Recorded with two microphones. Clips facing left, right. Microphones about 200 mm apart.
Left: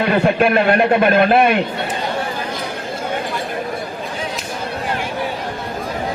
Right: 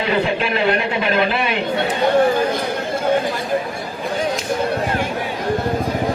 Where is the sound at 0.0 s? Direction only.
55° left (ahead or behind).